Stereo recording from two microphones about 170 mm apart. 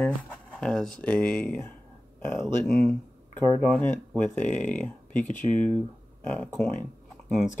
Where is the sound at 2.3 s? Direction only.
Centre (ahead or behind).